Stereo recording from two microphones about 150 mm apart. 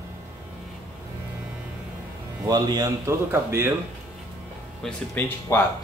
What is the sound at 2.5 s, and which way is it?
A man's voice, 25° right (ahead or behind).